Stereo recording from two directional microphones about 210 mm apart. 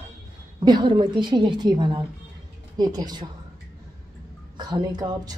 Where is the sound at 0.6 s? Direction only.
20° right (ahead or behind).